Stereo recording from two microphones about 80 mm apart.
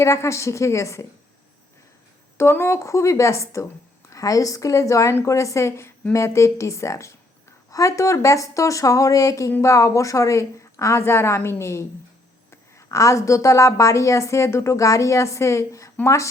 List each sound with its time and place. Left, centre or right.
0.0 s a woman's voice: left
2.4 s a woman's voice: left